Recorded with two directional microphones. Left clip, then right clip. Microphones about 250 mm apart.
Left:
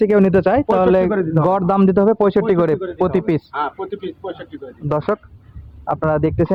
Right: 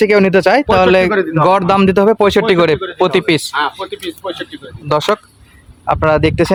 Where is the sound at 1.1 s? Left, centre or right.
Left.